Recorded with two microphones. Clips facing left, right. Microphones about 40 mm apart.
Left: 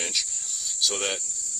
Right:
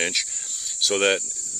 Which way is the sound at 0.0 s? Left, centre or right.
Right.